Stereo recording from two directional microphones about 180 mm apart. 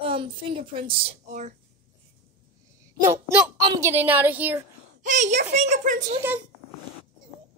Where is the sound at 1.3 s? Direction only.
40° right (ahead or behind).